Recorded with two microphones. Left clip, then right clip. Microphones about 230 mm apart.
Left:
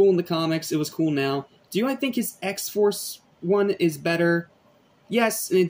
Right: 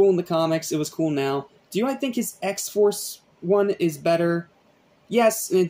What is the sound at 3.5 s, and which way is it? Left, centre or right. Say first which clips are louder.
Speech: right 1 dB; centre.